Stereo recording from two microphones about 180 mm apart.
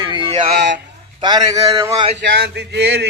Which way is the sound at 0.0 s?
25° right (ahead or behind).